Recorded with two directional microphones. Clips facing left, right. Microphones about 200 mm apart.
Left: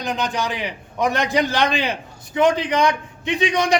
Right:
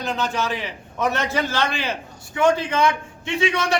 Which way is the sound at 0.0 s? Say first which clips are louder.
Left 1 dB; 15° left (ahead or behind).